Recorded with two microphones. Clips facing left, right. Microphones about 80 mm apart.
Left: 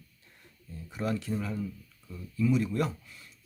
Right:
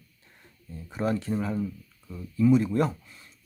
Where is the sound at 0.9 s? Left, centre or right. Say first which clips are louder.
Right 4 dB; right.